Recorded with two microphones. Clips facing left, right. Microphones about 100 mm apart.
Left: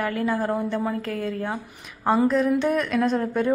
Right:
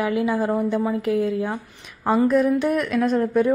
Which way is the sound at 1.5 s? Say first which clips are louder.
Right 1 dB; 5° left (ahead or behind).